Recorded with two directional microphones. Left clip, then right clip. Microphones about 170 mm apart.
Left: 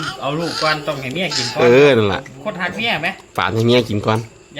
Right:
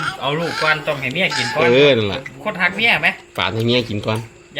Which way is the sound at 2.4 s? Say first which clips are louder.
Right 9 dB; 40° right (ahead or behind).